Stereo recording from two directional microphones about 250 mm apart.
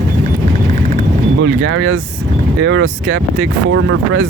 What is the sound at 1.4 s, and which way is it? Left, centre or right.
Speech, right.